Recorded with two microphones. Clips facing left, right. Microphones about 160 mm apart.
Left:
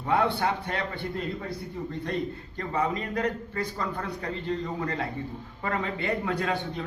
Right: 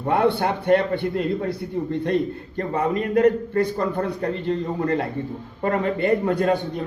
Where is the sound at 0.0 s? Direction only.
55° right (ahead or behind).